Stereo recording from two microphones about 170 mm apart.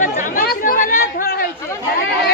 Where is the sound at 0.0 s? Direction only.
50° left (ahead or behind).